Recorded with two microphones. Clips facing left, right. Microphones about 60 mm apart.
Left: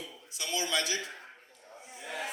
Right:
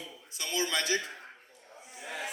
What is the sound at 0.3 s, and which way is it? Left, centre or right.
Speech, right.